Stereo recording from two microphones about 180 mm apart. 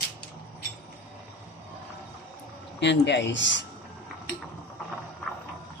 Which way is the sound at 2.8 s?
75° left (ahead or behind).